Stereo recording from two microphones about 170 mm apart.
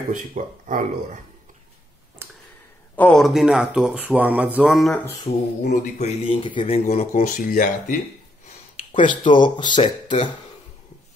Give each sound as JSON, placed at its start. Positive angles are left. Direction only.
{"t": 0.1, "sound": "speech", "side_deg": -50}
{"t": 2.2, "sound": "a sound", "side_deg": -15}
{"t": 3.0, "sound": "speech", "side_deg": 0}
{"t": 5.3, "sound": "speech", "side_deg": 30}
{"t": 8.5, "sound": "a sound", "side_deg": 45}
{"t": 9.1, "sound": "speech", "side_deg": 25}